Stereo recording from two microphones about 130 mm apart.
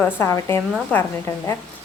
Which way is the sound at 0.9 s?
10° left (ahead or behind).